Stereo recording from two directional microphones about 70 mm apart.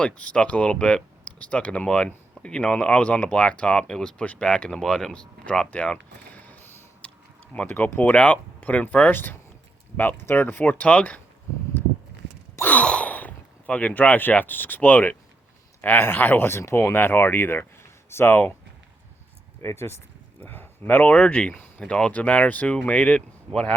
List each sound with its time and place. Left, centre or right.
0.0 s speech: centre
6.3 s a sound: left
7.5 s speech: left
12.6 s speech: centre; by 18.4 s left
19.6 s speech: left
20.4 s speech: left